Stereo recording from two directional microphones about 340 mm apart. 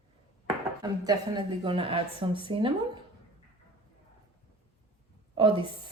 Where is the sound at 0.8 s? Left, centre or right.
Centre.